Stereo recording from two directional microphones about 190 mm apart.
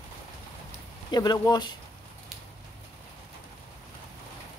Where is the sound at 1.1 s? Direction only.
20° left (ahead or behind).